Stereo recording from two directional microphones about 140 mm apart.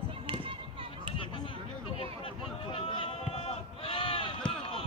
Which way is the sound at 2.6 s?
40° left (ahead or behind).